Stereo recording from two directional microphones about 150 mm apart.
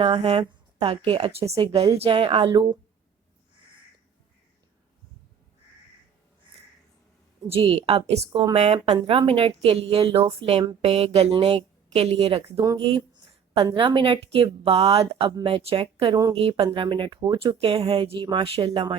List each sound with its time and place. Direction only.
0.0 s speech: 40° right (ahead or behind)
7.5 s a woman's voice: 40° right (ahead or behind)
8.9 s a woman's voice: 30° right (ahead or behind)
12.5 s speech: 25° right (ahead or behind)
13.7 s speech: 35° right (ahead or behind)